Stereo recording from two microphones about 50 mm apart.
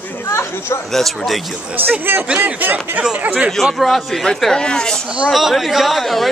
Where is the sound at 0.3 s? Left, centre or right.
Left.